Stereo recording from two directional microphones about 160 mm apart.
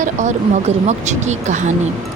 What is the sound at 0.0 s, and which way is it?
Speech, 50° right (ahead or behind).